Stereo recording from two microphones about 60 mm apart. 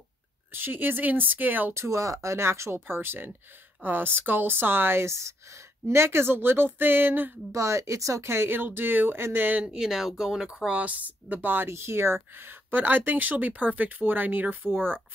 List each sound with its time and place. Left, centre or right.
0.5 s speech: right
1.7 s speech: right
5.0 s speech: right
5.9 s speech: right
7.5 s speech: right
8.3 s speech: right
9.6 s speech: centre
9.8 s speech: centre; by 15.0 s right